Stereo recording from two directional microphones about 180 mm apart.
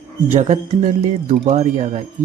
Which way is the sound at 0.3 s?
40° right (ahead or behind).